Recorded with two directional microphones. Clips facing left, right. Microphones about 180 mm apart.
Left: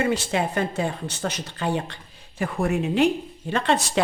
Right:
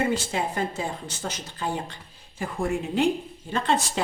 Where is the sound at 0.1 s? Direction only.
70° left (ahead or behind).